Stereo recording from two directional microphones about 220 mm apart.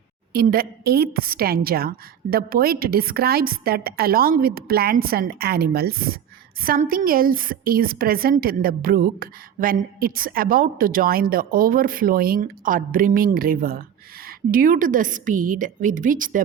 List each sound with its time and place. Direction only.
0.3 s a woman's voice: 40° right (ahead or behind)